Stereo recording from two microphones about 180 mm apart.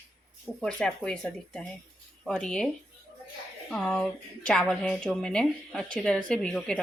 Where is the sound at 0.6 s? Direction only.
5° left (ahead or behind).